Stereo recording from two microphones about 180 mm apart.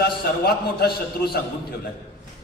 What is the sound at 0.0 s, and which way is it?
A man's voice, 60° left (ahead or behind).